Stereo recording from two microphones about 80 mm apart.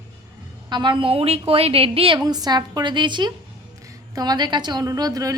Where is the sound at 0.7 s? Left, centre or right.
Right.